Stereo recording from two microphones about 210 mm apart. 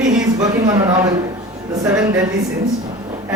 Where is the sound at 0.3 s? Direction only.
15° right (ahead or behind).